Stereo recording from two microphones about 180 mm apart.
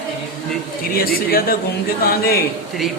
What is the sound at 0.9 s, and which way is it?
A man's voice, 55° left (ahead or behind).